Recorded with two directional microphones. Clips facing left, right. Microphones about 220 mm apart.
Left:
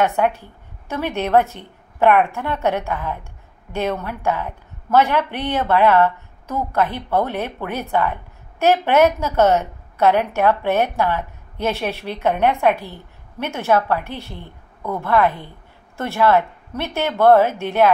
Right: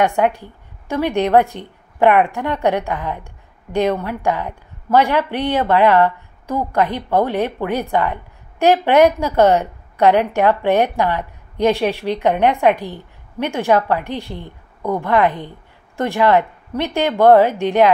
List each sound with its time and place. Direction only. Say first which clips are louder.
0.0 s a woman's voice: right 2 dB; 15° right (ahead or behind)